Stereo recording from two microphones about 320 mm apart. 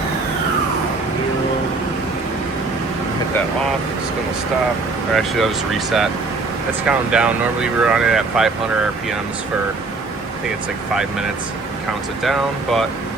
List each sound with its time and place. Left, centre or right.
5.1 s speech: centre
12.2 s speech: centre